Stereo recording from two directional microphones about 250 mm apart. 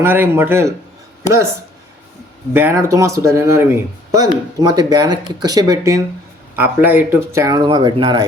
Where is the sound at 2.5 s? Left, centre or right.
Centre.